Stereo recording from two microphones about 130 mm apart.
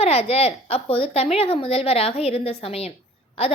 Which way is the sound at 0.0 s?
50° left (ahead or behind).